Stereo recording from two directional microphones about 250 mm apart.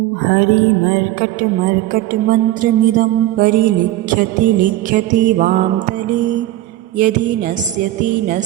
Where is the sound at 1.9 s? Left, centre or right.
Right.